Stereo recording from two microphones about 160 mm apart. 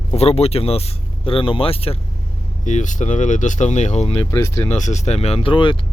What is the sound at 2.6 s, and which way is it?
Speech, 50° left (ahead or behind).